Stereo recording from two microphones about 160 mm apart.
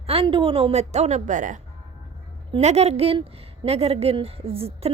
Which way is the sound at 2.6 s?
40° right (ahead or behind).